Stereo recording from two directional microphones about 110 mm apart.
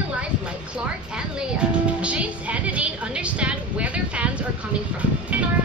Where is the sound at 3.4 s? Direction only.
10° right (ahead or behind).